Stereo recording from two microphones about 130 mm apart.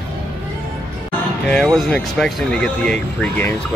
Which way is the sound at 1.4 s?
5° left (ahead or behind).